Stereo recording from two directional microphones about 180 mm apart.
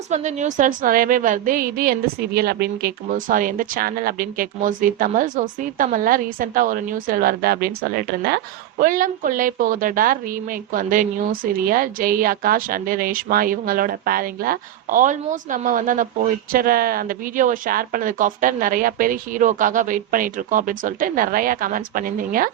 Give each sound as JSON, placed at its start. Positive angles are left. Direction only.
{"t": 0.1, "sound": "a woman's voice", "side_deg": -40}